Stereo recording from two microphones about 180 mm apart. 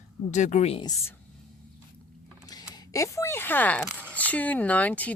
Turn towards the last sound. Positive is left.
turn(degrees=10)  # may be behind; listen again after turning